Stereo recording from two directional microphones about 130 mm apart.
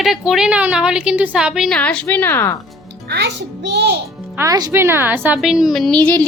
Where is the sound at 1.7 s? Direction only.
10° left (ahead or behind).